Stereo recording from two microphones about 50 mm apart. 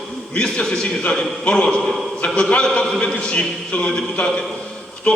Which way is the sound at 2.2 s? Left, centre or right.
Centre.